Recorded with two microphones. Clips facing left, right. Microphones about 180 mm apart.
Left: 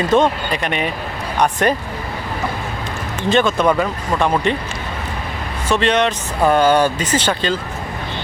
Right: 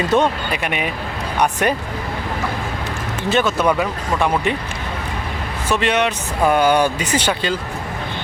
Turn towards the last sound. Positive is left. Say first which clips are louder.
# left 1 dB
turn(degrees=-10)  # may be behind; listen again after turning